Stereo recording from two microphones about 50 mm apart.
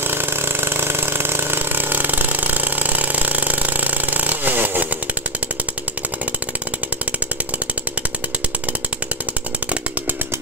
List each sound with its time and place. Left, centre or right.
0.0 s vehicle: right